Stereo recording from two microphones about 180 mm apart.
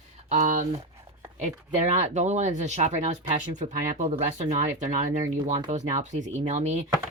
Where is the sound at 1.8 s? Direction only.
40° right (ahead or behind).